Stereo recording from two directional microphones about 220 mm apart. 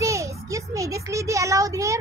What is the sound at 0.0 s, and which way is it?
A child's voice, 15° right (ahead or behind).